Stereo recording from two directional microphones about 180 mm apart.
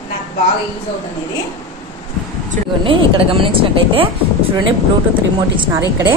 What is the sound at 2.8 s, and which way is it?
Speech, 30° right (ahead or behind).